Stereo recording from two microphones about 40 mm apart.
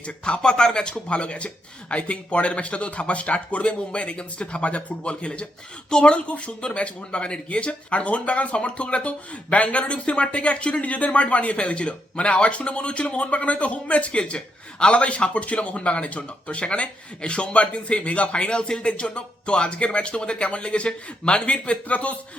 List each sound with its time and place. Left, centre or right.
0.3 s a man's voice: centre; by 22.2 s left